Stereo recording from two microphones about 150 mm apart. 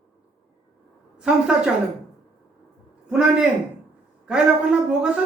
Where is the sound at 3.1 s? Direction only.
5° right (ahead or behind).